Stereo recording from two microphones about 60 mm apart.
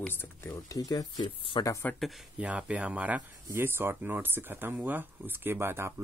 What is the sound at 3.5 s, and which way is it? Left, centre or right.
Speech, right.